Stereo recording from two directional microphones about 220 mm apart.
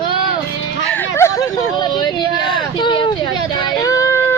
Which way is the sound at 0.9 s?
10° left (ahead or behind).